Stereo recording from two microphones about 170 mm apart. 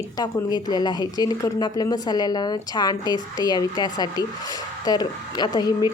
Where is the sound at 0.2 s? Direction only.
25° left (ahead or behind).